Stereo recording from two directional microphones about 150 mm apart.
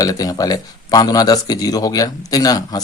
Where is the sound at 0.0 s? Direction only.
25° left (ahead or behind).